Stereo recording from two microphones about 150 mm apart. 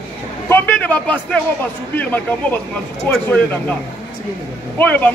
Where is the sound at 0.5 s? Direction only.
10° left (ahead or behind).